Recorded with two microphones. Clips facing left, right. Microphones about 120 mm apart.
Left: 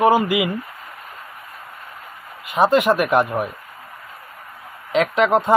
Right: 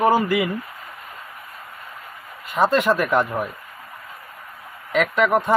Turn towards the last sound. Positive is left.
turn(degrees=20)  # may be behind; listen again after turning